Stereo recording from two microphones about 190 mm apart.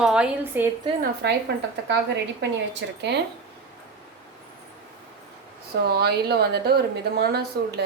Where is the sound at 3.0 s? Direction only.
60° right (ahead or behind).